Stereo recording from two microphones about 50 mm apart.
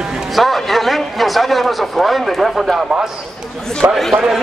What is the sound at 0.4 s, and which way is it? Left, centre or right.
A man's voice, centre.